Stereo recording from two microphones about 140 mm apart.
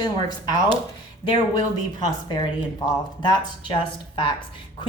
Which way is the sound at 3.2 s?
30° left (ahead or behind).